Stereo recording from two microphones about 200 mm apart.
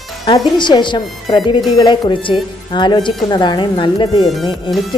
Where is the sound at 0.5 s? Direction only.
20° left (ahead or behind).